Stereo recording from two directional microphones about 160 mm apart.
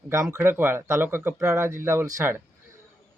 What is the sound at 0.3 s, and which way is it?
Speech, 10° right (ahead or behind).